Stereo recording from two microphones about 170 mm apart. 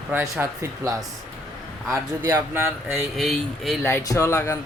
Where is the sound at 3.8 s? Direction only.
15° left (ahead or behind).